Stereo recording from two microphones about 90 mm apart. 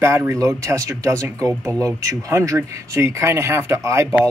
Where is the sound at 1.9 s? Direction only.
35° right (ahead or behind).